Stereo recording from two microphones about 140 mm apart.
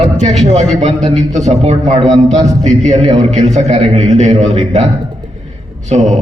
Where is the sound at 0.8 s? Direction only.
50° right (ahead or behind).